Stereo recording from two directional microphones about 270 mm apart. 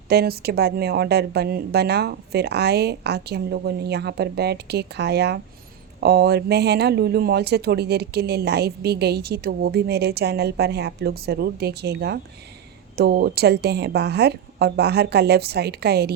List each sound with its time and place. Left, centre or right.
0.1 s speech: right